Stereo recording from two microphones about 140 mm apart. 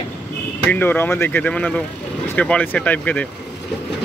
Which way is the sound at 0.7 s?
15° left (ahead or behind).